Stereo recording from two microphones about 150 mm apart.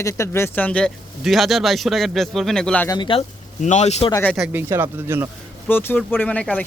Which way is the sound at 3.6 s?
50° left (ahead or behind).